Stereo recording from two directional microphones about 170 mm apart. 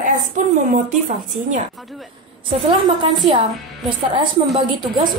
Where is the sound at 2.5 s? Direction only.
30° right (ahead or behind).